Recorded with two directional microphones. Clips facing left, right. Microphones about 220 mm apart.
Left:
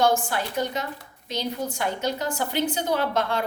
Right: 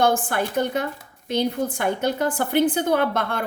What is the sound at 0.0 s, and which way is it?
A woman's voice, 55° right (ahead or behind).